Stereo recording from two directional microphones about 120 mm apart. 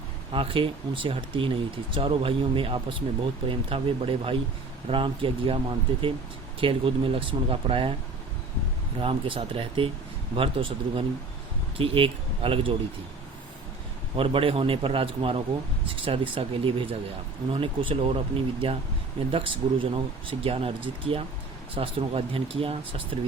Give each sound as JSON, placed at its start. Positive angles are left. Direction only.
{"t": 0.3, "sound": "speech", "side_deg": -50}
{"t": 9.0, "sound": "speech", "side_deg": -50}
{"t": 14.2, "sound": "speech", "side_deg": -50}